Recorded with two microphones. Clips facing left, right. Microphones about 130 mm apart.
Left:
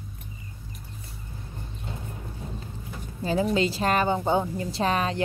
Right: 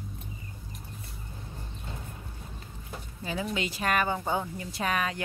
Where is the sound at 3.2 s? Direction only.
35° left (ahead or behind).